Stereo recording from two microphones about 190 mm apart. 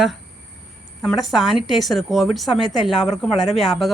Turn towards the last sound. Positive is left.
turn(degrees=0)  # may be behind; listen again after turning